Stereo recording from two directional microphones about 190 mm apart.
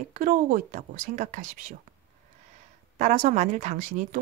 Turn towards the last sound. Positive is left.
turn(degrees=-40)  # may be behind; listen again after turning